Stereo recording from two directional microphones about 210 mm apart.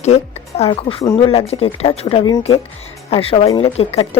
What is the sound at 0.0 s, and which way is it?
Speech, 30° left (ahead or behind).